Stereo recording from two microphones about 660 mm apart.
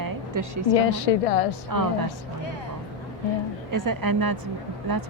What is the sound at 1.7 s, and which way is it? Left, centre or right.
Speech, right.